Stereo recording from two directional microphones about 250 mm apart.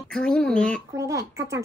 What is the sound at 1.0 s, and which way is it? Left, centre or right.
Speech, centre.